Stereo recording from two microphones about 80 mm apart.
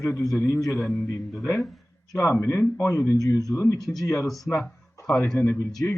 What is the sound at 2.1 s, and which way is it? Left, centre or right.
Speech, left.